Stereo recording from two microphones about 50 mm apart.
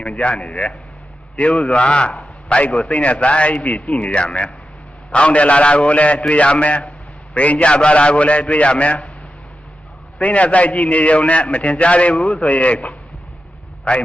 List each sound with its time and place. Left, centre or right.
0.0 s a man's voice: left
10.2 s a man's voice: left